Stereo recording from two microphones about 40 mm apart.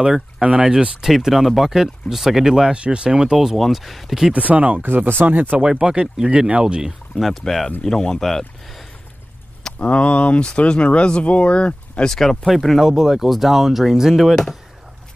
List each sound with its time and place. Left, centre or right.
0.4 s speech: right
1.1 s speech: centre
2.7 s speech: right
3.3 s speech: centre
4.3 s speech: right
4.8 s speech: right
5.6 s speech: centre
7.2 s speech: centre
9.8 s speech: left
12.0 s speech: centre
12.8 s speech: centre